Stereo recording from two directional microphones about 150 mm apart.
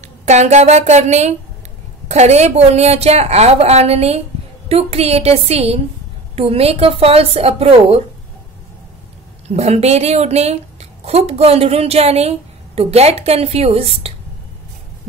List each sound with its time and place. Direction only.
0.2 s a woman's voice: 50° right (ahead or behind)
9.5 s a woman's voice: 45° right (ahead or behind)